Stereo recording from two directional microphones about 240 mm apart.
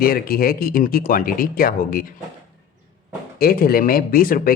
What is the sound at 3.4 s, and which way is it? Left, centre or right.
A man's voice, left.